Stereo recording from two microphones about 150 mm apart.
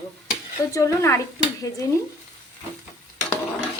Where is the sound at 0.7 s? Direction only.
20° left (ahead or behind).